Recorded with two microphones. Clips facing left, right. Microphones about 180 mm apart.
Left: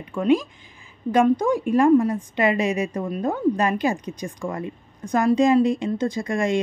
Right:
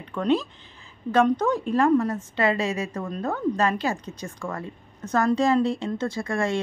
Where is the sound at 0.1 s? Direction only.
10° left (ahead or behind).